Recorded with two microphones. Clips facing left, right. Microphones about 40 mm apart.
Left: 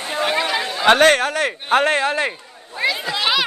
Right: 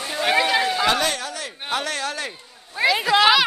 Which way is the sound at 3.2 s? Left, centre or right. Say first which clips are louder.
Right 3 dB; centre.